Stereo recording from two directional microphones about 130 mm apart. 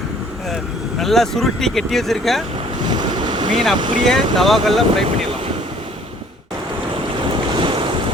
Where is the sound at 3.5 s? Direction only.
Centre (ahead or behind).